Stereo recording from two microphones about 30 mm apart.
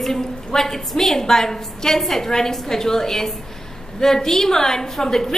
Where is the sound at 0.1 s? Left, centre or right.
Centre.